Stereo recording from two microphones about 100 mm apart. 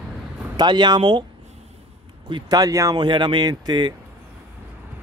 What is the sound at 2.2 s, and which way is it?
Speech, 50° right (ahead or behind).